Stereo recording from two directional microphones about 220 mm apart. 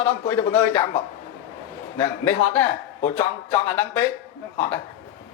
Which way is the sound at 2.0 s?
10° left (ahead or behind).